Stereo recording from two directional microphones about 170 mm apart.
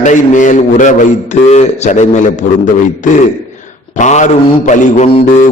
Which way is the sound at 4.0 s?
45° left (ahead or behind).